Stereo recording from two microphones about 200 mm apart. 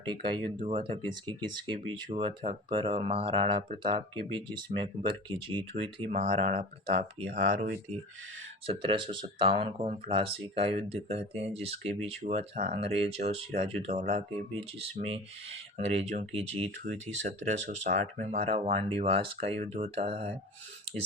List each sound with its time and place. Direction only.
0.0 s speech: 25° right (ahead or behind); by 7.9 s 40° right (ahead or behind)
8.6 s speech: 25° right (ahead or behind)